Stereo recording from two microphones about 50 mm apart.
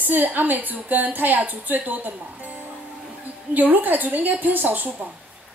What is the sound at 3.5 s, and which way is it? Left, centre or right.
A woman's voice, right.